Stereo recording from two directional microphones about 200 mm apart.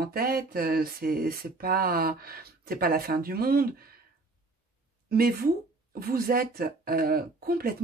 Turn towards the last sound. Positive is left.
turn(degrees=-50)  # may be behind; listen again after turning